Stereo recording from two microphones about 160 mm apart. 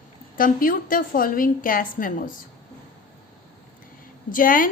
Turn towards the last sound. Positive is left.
turn(degrees=60)  # may be behind; listen again after turning